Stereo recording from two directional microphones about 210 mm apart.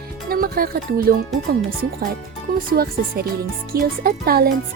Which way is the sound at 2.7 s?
45° right (ahead or behind).